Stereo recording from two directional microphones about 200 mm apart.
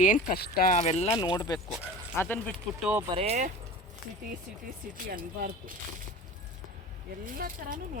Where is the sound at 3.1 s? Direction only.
30° right (ahead or behind).